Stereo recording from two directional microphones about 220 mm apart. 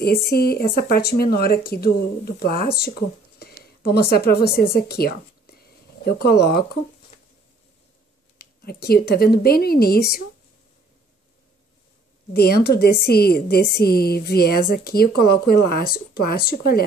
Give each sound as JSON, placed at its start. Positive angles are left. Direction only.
{"t": 0.0, "sound": "a woman's voice", "side_deg": 45}
{"t": 8.4, "sound": "a woman's voice", "side_deg": 45}
{"t": 12.4, "sound": "a woman's voice", "side_deg": 45}